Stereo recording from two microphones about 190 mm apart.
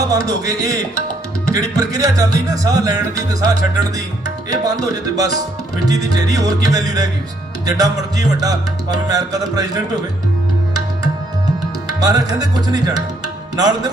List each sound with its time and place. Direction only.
0.1 s music: 20° right (ahead or behind)
11.9 s music: 20° right (ahead or behind)
13.2 s tabla: 20° right (ahead or behind)